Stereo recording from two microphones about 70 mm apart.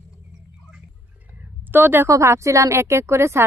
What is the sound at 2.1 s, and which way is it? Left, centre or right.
A woman's voice, right.